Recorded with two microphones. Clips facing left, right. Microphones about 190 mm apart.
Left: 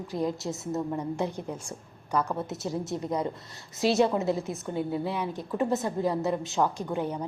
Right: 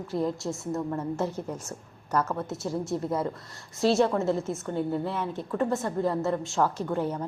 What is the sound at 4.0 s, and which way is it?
A woman's voice, 15° left (ahead or behind).